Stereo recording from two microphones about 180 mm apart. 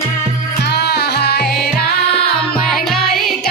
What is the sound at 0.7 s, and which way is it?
Music, 65° left (ahead or behind).